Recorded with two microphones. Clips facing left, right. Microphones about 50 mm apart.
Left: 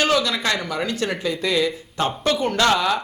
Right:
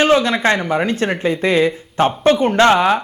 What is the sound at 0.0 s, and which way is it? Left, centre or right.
Speech, right.